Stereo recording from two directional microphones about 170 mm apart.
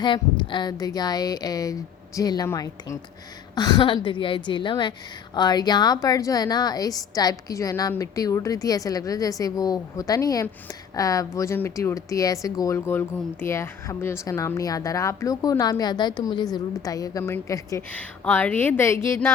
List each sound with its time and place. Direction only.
0.0 s speech: 30° left (ahead or behind)